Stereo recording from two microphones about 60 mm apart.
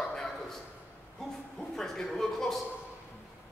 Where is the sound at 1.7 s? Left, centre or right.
Centre.